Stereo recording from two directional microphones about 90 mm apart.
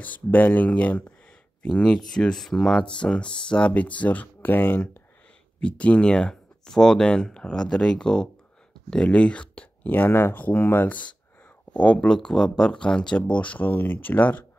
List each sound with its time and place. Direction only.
0.0 s speech: 20° left (ahead or behind)